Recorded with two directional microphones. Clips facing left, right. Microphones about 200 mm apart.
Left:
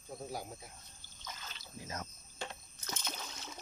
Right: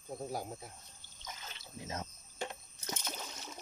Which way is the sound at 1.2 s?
20° right (ahead or behind).